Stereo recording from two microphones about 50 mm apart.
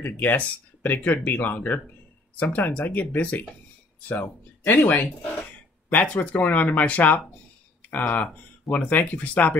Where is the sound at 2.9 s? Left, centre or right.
Left.